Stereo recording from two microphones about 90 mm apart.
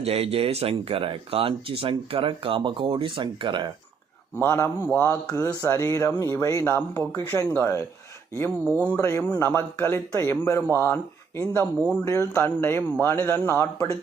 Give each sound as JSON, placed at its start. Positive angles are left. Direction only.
{"t": 0.1, "sound": "speech", "side_deg": -90}
{"t": 4.4, "sound": "speech", "side_deg": 25}
{"t": 6.7, "sound": "speech", "side_deg": 25}
{"t": 9.0, "sound": "speech", "side_deg": 30}